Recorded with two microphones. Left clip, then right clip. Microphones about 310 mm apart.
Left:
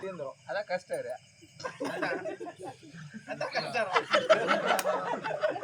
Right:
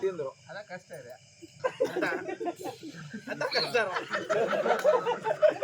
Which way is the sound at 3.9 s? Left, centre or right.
Left.